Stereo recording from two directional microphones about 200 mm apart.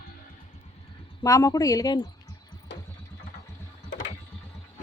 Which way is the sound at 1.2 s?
15° left (ahead or behind).